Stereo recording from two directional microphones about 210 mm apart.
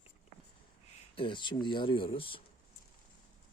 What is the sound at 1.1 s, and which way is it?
Speech, 25° left (ahead or behind).